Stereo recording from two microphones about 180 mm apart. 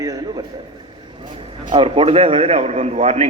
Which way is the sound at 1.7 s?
30° right (ahead or behind).